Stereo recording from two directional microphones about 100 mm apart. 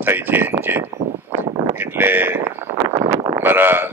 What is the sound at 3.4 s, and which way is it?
Speech, 20° right (ahead or behind).